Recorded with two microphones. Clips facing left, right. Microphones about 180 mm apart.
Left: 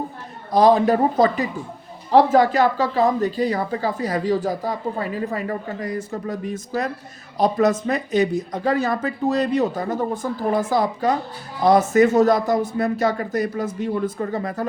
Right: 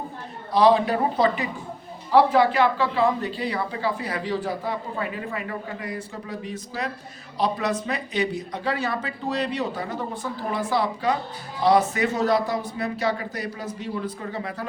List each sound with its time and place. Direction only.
0.5 s a woman's voice: 45° left (ahead or behind)